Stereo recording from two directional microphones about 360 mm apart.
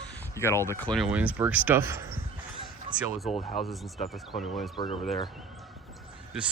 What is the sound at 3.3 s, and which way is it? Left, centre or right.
Speech, centre.